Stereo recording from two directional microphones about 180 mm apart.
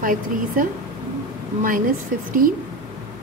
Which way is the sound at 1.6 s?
50° right (ahead or behind).